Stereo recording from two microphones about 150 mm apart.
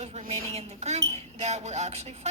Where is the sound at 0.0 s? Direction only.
45° right (ahead or behind).